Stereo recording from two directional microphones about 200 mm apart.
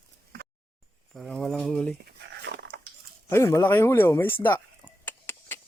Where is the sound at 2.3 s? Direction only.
60° right (ahead or behind).